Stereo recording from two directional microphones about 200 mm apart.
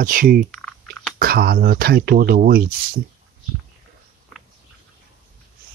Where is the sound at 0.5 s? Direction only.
Centre (ahead or behind).